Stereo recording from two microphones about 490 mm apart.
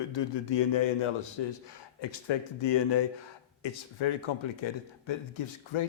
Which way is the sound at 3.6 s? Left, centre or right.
Left.